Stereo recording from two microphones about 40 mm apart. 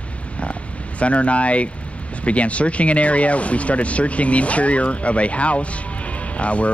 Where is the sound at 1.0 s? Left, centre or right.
Left.